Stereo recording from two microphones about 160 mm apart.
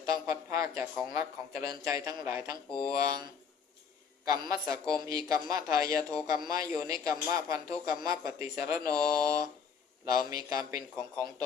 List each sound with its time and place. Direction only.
0.0 s a man's voice: 20° right (ahead or behind)
2.6 s speech: 5° left (ahead or behind)
3.0 s a man's voice: 20° right (ahead or behind)
4.3 s a man's voice: 20° right (ahead or behind)